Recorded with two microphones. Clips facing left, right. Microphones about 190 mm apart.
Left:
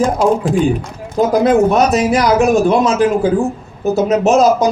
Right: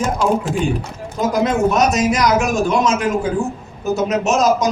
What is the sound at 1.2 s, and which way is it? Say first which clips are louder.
Speech: left 6 dB; 30° left (ahead or behind).